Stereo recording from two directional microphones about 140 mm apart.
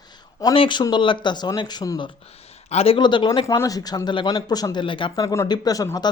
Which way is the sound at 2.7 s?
45° left (ahead or behind).